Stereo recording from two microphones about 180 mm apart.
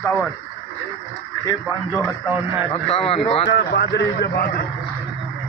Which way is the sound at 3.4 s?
70° left (ahead or behind).